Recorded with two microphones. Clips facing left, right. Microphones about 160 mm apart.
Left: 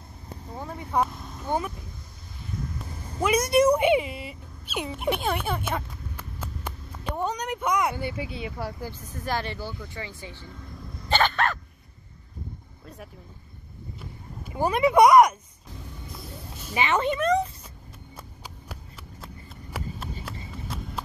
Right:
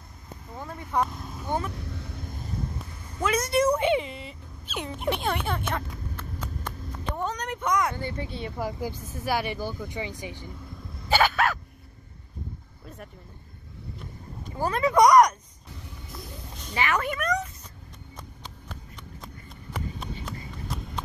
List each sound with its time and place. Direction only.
0.6 s speech: 15° left (ahead or behind)
1.0 s vehicle: centre (ahead or behind)
1.4 s speech: 10° left (ahead or behind)
1.7 s vehicle: 75° right (ahead or behind)
3.2 s speech: 10° left (ahead or behind)
8.5 s speech: 15° right (ahead or behind)
11.1 s dog: 5° right (ahead or behind)
12.8 s vehicle: centre (ahead or behind)
14.4 s speech: 15° left (ahead or behind)
16.1 s music: 5° left (ahead or behind)
16.7 s speech: 25° left (ahead or behind)
18.1 s a sound: 10° left (ahead or behind)
19.2 s run: centre (ahead or behind)